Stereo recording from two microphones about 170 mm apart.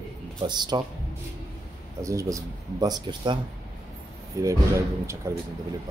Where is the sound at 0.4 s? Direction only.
25° right (ahead or behind).